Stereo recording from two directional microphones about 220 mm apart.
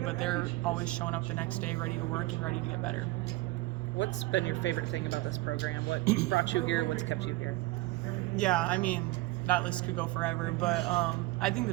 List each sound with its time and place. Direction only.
0.0 s speech: centre (ahead or behind)
3.9 s speech: 55° left (ahead or behind)
8.4 s speech: 5° left (ahead or behind)